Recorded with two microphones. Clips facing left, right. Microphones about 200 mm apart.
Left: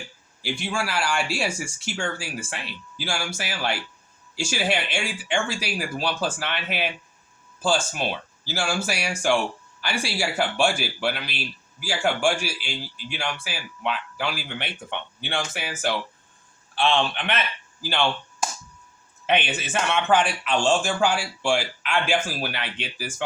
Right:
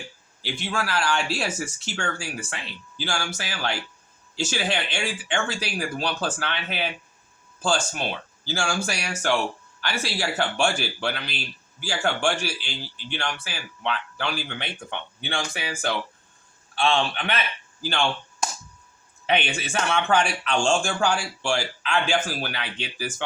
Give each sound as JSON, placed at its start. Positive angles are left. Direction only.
{"t": 0.4, "sound": "a man's voice", "side_deg": 10}
{"t": 19.2, "sound": "a man's voice", "side_deg": 5}